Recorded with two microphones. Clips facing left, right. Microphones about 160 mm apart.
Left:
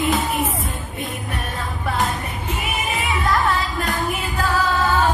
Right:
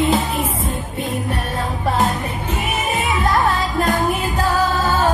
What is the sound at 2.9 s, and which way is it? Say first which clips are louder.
Music: right 3 dB; 35° right (ahead or behind).